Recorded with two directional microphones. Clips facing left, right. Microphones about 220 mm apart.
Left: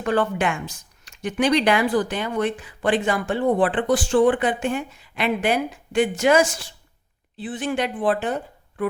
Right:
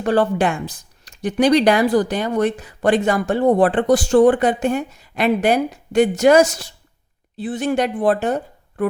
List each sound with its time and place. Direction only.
0.0 s speech: 35° right (ahead or behind)